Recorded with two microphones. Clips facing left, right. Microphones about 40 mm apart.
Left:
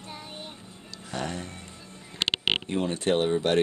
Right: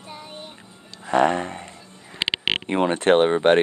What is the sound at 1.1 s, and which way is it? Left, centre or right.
Speech, right.